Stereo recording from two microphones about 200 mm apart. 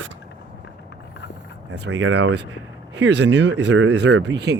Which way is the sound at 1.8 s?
60° right (ahead or behind).